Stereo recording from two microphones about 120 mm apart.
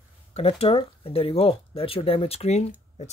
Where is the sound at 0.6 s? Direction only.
50° left (ahead or behind); by 2.7 s 65° left (ahead or behind).